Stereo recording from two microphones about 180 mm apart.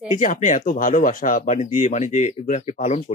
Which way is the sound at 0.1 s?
45° left (ahead or behind).